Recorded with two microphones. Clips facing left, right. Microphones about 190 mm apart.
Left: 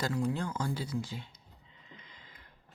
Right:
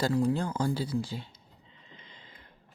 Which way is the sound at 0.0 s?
35° right (ahead or behind).